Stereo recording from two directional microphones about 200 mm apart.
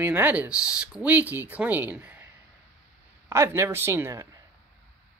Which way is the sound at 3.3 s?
15° right (ahead or behind).